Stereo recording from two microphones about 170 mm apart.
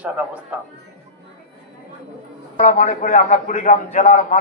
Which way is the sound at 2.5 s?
50° left (ahead or behind).